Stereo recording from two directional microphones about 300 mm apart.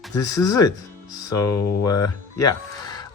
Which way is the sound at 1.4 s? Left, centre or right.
Left.